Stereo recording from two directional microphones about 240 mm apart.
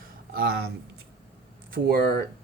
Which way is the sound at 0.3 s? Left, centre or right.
Right.